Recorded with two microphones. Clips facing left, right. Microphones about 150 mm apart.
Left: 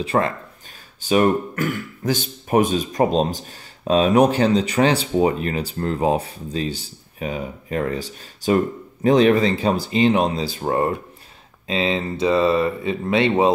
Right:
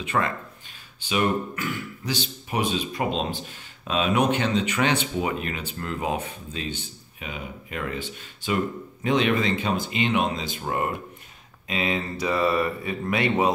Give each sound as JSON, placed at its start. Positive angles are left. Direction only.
{"t": 0.0, "sound": "speech", "side_deg": 35}